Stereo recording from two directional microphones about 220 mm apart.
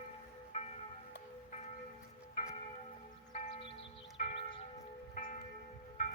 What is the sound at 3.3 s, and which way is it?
Church bell, 30° left (ahead or behind).